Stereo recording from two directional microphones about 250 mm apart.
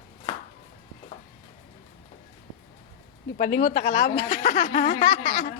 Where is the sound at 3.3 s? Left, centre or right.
Left.